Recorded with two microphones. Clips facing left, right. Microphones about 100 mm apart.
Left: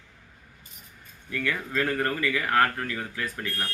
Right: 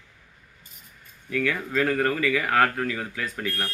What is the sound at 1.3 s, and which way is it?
Speech, 10° right (ahead or behind).